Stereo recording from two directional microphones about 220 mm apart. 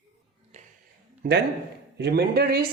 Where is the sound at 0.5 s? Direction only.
30° right (ahead or behind).